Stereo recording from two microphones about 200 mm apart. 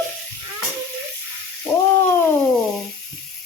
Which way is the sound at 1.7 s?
5° left (ahead or behind).